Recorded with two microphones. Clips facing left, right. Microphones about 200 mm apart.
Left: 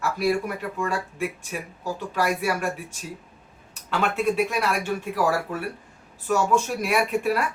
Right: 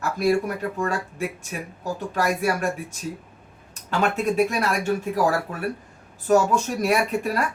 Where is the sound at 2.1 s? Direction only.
45° right (ahead or behind).